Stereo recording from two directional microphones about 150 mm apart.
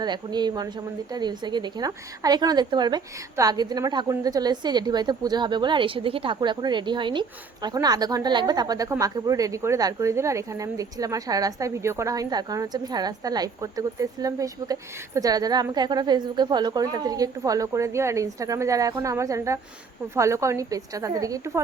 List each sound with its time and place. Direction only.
0.0 s a woman's voice: 30° right (ahead or behind)